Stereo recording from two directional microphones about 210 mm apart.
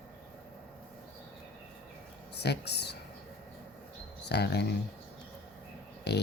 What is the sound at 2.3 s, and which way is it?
Speech, 50° left (ahead or behind).